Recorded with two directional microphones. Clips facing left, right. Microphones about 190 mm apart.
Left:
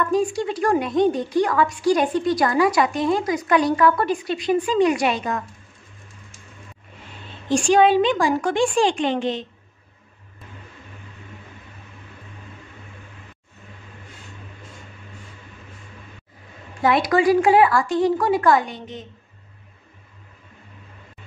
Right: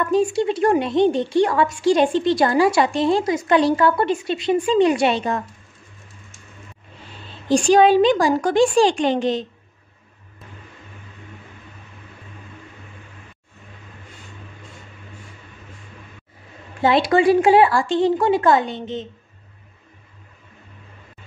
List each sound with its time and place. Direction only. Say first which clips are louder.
0.1 s a woman's voice: right 3 dB; 25° right (ahead or behind)
7.4 s a woman's voice: right 2 dB; 35° right (ahead or behind)
16.8 s a woman's voice: right 2 dB; 25° right (ahead or behind)